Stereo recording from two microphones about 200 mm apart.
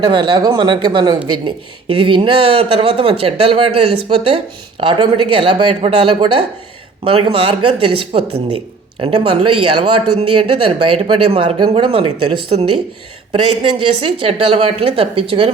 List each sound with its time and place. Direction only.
0.0 s speech: 25° right (ahead or behind)